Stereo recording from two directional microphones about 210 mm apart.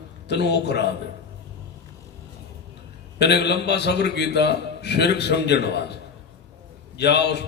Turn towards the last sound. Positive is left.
turn(degrees=55)  # may be behind; listen again after turning